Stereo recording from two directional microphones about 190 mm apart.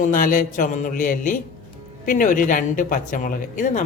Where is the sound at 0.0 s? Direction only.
45° left (ahead or behind).